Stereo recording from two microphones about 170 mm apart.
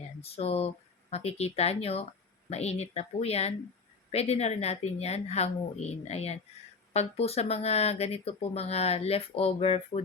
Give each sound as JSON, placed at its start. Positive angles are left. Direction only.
{"t": 0.2, "sound": "speech", "side_deg": 35}